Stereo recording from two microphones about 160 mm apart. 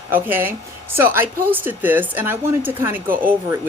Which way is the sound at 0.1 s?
15° right (ahead or behind).